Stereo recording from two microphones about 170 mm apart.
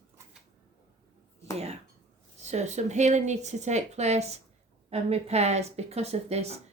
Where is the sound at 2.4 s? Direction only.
40° right (ahead or behind).